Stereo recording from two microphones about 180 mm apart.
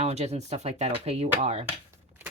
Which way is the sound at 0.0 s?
35° right (ahead or behind).